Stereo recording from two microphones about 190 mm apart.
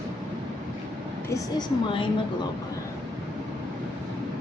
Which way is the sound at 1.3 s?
20° left (ahead or behind).